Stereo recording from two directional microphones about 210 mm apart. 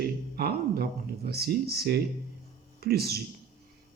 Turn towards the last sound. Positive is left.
turn(degrees=-50)  # may be behind; listen again after turning